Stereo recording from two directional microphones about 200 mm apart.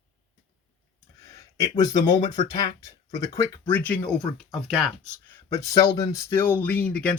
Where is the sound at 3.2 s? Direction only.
15° left (ahead or behind).